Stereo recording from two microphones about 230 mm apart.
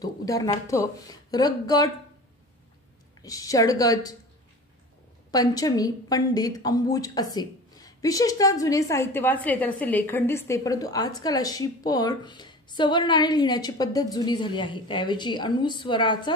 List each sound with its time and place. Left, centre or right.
0.0 s a woman's voice: centre
3.2 s a woman's voice: centre
5.3 s a woman's voice: centre